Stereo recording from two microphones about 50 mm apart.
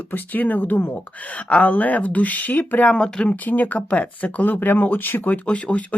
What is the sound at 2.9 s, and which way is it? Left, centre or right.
Speech, left.